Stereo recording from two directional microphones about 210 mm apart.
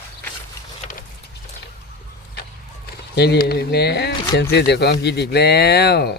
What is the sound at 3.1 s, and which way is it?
Speech, 50° left (ahead or behind).